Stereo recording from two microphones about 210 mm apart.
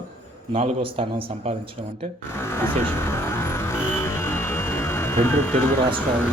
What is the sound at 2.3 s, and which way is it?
Music, 10° left (ahead or behind).